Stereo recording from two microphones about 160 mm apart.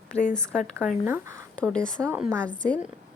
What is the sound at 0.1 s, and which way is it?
Speech, 40° left (ahead or behind).